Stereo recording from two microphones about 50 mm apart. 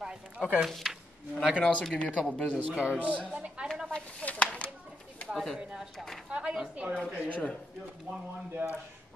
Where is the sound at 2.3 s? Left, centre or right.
Left.